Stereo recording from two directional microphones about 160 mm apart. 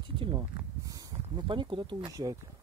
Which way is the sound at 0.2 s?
30° right (ahead or behind).